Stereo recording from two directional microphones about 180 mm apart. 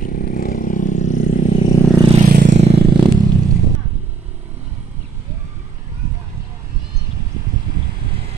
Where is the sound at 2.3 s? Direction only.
45° right (ahead or behind).